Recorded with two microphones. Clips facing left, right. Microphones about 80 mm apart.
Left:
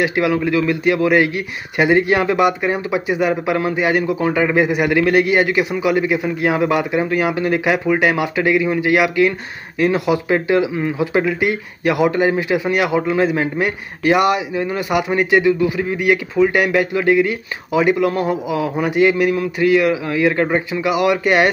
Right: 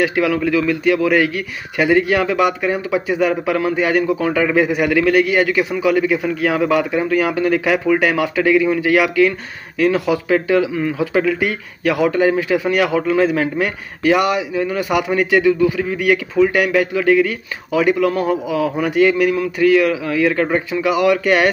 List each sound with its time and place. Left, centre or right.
0.0 s speech: centre